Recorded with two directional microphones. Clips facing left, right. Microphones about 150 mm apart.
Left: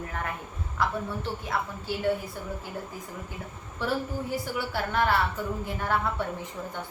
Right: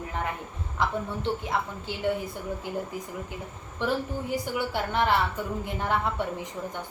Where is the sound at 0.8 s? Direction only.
20° right (ahead or behind).